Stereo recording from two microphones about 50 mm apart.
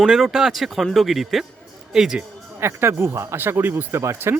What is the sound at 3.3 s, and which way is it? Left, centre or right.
Speech, right.